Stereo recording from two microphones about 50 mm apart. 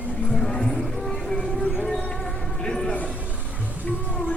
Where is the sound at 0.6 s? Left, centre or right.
Centre.